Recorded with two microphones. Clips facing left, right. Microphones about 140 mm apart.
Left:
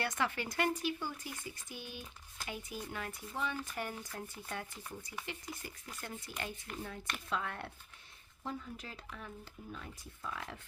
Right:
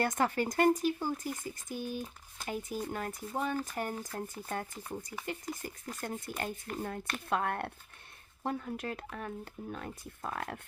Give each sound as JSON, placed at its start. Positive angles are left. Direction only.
{"t": 0.0, "sound": "speech", "side_deg": -45}